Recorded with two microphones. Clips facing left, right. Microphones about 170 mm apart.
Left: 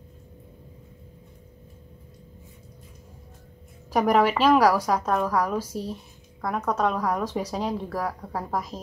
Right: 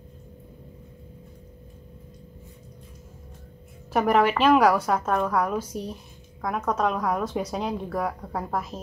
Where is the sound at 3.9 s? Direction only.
5° right (ahead or behind).